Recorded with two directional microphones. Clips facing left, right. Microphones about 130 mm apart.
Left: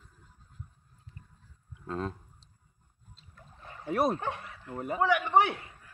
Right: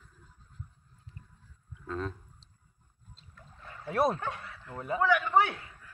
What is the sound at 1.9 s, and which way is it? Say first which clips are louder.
Speech: left 1 dB; 40° left (ahead or behind).